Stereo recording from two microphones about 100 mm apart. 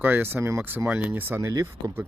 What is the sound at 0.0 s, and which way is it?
Speech, 20° right (ahead or behind).